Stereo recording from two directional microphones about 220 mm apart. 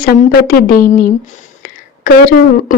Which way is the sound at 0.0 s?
45° left (ahead or behind).